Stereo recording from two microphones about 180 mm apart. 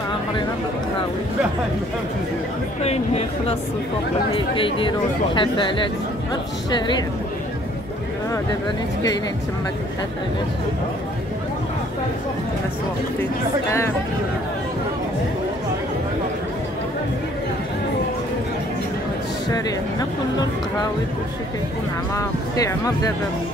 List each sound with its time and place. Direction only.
4.4 s speech: 30° left (ahead or behind)
13.2 s speech: 15° left (ahead or behind)
19.5 s speech: 20° left (ahead or behind)
22.1 s speech: 20° left (ahead or behind)